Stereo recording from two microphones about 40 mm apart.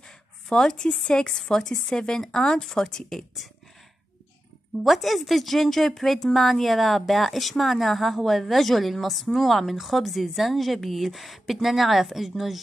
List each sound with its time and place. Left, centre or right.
0.5 s speech: centre
4.8 s a woman's voice: centre